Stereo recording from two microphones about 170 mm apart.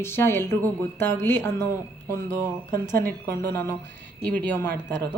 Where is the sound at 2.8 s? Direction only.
55° right (ahead or behind).